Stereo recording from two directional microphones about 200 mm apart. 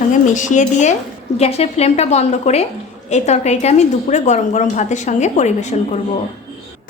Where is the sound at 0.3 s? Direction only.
40° left (ahead or behind).